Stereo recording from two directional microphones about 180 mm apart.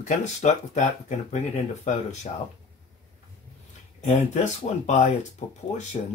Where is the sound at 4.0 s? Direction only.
40° left (ahead or behind).